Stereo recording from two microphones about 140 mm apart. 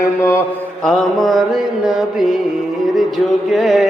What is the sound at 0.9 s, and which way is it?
Mantra, 5° left (ahead or behind).